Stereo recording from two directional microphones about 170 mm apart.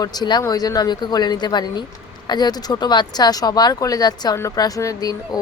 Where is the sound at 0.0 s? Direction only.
25° left (ahead or behind).